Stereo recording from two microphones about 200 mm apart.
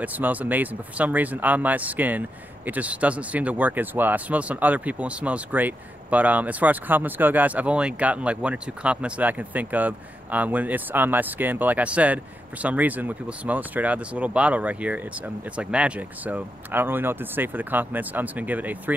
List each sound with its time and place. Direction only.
0.0 s speech: 10° right (ahead or behind)